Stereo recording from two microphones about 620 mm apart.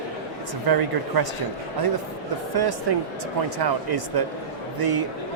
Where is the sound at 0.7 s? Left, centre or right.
Right.